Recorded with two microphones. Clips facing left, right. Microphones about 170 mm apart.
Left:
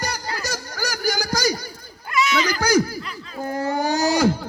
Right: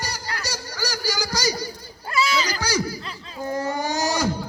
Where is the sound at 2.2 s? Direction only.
30° right (ahead or behind).